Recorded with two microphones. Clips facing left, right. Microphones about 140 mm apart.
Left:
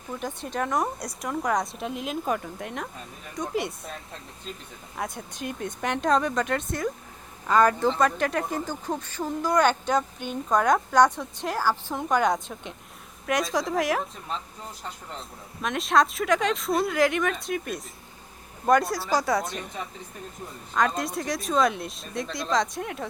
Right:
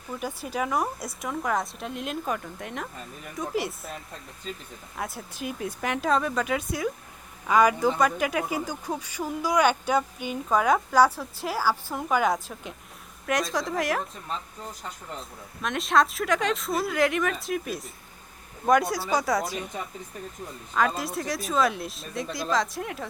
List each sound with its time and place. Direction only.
0.1 s speech: 5° right (ahead or behind)